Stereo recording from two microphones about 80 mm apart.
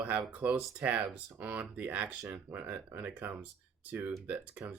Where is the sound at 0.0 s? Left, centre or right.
Centre.